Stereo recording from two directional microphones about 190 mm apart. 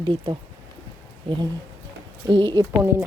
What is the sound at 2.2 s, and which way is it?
Speech, 25° right (ahead or behind).